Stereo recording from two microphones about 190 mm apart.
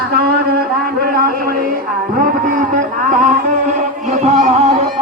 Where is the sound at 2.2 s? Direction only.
45° right (ahead or behind).